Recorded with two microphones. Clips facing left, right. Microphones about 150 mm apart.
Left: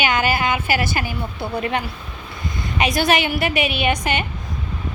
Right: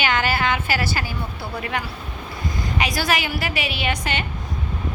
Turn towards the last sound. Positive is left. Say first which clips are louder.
# left 4 dB
turn(degrees=20)  # may be behind; listen again after turning